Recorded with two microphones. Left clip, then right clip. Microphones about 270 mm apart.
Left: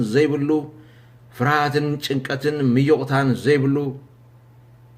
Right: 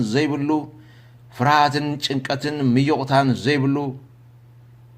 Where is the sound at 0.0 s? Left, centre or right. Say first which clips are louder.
Left 3 dB; centre.